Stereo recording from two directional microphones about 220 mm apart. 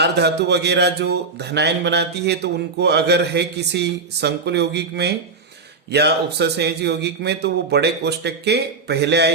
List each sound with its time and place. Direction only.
0.0 s a man's voice: 50° right (ahead or behind)